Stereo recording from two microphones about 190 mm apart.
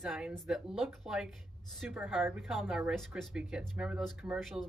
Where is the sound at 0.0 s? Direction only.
Centre (ahead or behind).